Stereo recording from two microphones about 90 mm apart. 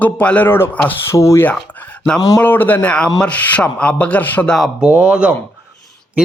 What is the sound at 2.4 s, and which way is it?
A man's voice, 20° left (ahead or behind).